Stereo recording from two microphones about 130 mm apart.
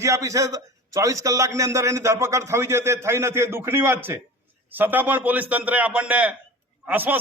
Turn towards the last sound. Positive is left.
turn(degrees=-15)  # may be behind; listen again after turning